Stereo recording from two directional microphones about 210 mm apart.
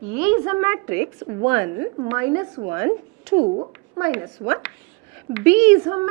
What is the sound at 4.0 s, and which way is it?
A woman's voice, 15° right (ahead or behind).